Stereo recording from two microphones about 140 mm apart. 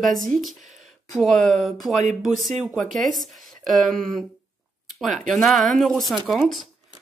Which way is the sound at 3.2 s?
Centre (ahead or behind).